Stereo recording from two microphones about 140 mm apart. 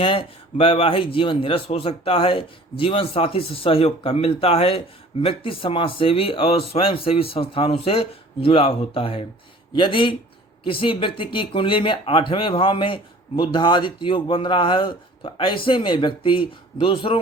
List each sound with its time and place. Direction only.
0.0 s speech: 40° left (ahead or behind)